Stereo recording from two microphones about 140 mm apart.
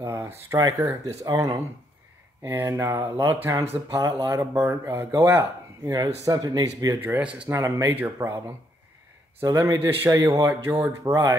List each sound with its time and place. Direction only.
0.0 s speech: 20° right (ahead or behind)
2.4 s speech: 15° right (ahead or behind)
9.4 s speech: 20° right (ahead or behind)